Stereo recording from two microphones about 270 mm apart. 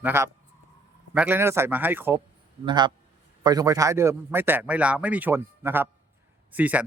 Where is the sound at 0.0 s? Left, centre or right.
Centre.